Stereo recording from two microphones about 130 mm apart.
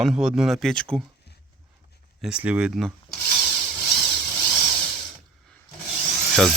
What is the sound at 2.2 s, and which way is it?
Speech, 5° right (ahead or behind).